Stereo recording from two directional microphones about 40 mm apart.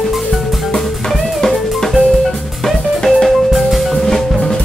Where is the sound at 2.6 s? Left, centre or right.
Centre.